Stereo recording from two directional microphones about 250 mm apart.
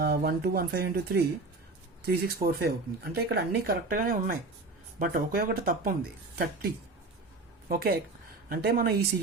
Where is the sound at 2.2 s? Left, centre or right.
Right.